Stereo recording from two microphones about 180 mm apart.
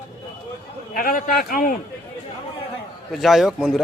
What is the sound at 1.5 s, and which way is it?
Speech, 50° left (ahead or behind).